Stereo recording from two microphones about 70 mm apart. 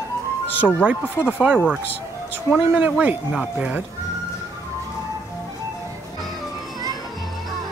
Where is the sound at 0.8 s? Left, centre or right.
Centre.